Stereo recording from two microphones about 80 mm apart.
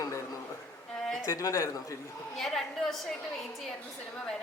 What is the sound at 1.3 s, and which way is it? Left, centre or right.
Speech, left.